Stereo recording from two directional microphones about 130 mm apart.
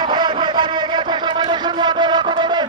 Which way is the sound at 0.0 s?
35° right (ahead or behind).